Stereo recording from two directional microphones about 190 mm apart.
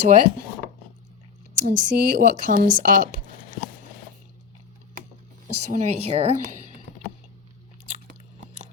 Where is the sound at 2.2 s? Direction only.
45° right (ahead or behind).